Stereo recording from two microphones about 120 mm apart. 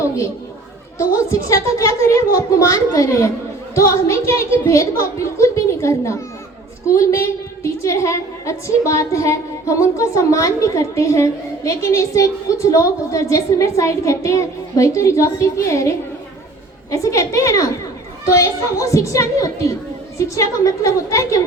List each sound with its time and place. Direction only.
0.9 s a woman's voice: 25° left (ahead or behind)